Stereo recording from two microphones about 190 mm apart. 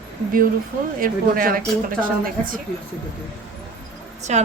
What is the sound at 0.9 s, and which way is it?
A woman's voice, 50° right (ahead or behind).